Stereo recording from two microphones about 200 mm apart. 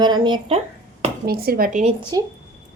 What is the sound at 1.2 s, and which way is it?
Speech, 50° right (ahead or behind).